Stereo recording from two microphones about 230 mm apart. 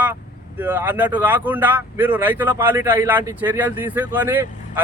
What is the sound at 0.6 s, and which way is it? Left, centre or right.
Speech, centre.